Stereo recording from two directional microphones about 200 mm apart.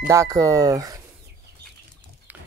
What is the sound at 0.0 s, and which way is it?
Speech, 15° right (ahead or behind).